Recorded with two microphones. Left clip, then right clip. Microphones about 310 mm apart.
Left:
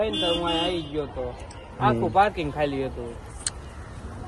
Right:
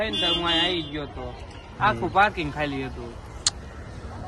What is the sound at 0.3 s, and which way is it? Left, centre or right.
Speech, right.